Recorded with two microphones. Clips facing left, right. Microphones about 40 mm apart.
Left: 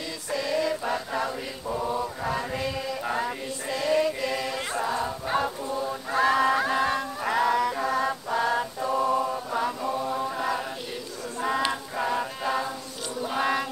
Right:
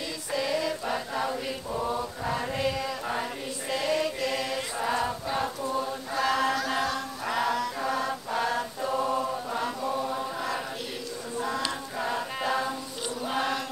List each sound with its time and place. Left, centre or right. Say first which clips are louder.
0.3 s music: left 2 dB; centre
1.8 s mantra: left 2 dB; centre
4.8 s choir: right 3 dB; centre
5.7 s chant: even; centre
6.1 s chant: left 4 dB; centre
6.8 s music: left 4 dB; centre
7.3 s chant: left 5 dB; centre
7.9 s mantra: left 3 dB; centre
9.2 s chant: left 3 dB; centre
11.4 s choir: left 6 dB; left
12.0 s music: left 2 dB; centre
13.2 s choir: left 4 dB; centre